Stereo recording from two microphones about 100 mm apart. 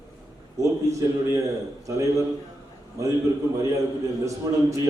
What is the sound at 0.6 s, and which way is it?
A man's voice, 30° right (ahead or behind).